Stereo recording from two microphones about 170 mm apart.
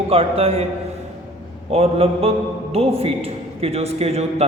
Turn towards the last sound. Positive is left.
turn(degrees=-40)  # may be behind; listen again after turning